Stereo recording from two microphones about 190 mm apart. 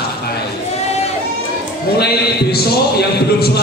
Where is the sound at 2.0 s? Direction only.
55° left (ahead or behind).